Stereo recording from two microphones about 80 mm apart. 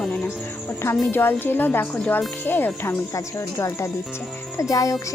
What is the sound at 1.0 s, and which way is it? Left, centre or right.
Speech, left.